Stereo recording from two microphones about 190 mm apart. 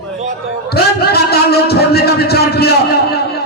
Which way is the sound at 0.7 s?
55° left (ahead or behind).